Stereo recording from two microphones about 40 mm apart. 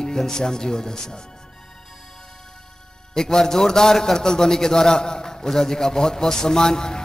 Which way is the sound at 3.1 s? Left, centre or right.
Centre.